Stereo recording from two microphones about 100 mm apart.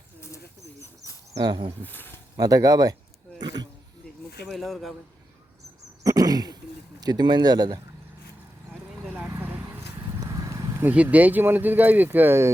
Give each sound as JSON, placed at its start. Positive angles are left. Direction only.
{"t": 1.4, "sound": "speech", "side_deg": -45}
{"t": 1.8, "sound": "speech", "side_deg": 20}
{"t": 2.3, "sound": "speech", "side_deg": -40}
{"t": 3.4, "sound": "a sound", "side_deg": -40}
{"t": 4.4, "sound": "speech", "side_deg": 0}
{"t": 6.0, "sound": "throat clearing", "side_deg": -35}
{"t": 7.0, "sound": "speech", "side_deg": -45}
{"t": 9.3, "sound": "vehicle", "side_deg": -20}
{"t": 10.2, "sound": "vehicle", "side_deg": -35}
{"t": 10.8, "sound": "speech", "side_deg": -15}